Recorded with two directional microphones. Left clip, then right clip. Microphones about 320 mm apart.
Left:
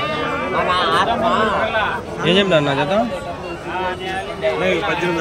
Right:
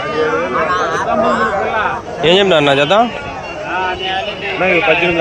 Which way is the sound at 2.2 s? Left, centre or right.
Centre.